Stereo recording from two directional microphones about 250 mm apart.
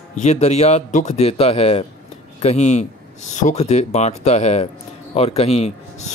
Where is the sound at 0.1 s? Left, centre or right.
Left.